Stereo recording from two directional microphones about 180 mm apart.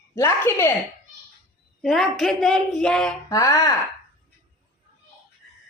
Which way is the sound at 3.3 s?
20° left (ahead or behind).